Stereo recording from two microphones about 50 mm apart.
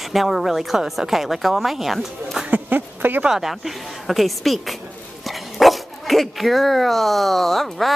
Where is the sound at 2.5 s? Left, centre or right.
Right.